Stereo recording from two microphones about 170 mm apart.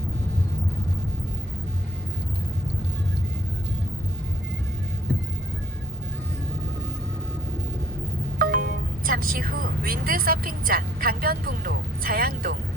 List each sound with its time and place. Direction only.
8.4 s speech: 60° right (ahead or behind)